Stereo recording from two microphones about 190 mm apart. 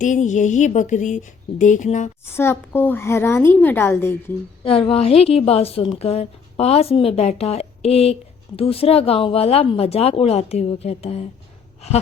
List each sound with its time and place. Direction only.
0.0 s a woman's voice: 40° left (ahead or behind)
2.3 s a woman's voice: 15° left (ahead or behind)
4.6 s a woman's voice: 30° left (ahead or behind)